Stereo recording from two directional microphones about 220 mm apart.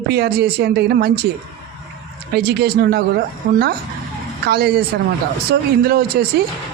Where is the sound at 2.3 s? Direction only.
45° right (ahead or behind).